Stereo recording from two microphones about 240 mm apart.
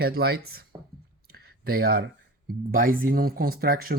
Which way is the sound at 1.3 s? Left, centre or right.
Right.